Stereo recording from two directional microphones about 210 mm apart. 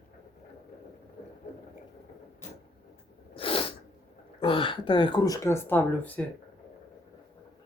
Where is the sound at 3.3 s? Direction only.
25° left (ahead or behind).